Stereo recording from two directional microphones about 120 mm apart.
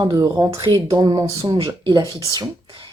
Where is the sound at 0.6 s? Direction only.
40° right (ahead or behind).